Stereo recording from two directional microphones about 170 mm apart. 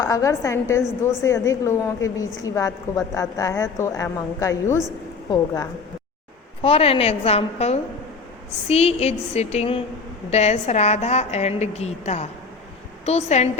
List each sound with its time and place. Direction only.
0.0 s a woman's voice: 20° left (ahead or behind)
6.6 s a woman's voice: 35° left (ahead or behind)